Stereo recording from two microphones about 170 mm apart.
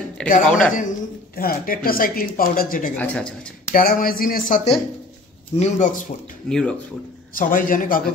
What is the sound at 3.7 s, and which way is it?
Speech, 60° left (ahead or behind).